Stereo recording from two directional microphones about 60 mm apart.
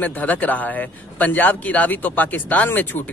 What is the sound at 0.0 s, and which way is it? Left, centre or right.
A man's voice, left.